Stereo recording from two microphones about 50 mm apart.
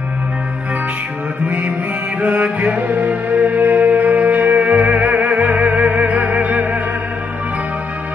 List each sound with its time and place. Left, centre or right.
2.2 s music: right